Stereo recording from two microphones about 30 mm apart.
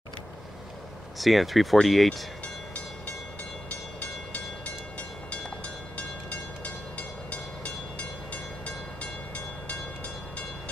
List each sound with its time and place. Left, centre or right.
1.1 s speech: centre
3.6 s train: left